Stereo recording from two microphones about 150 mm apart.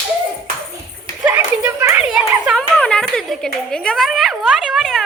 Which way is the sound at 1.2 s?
15° right (ahead or behind).